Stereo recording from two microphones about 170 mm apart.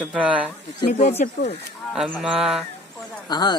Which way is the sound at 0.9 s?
45° left (ahead or behind).